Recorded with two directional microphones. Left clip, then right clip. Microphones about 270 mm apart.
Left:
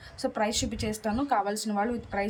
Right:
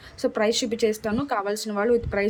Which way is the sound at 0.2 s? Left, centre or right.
Centre.